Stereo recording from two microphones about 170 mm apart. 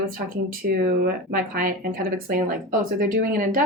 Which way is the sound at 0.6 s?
60° right (ahead or behind).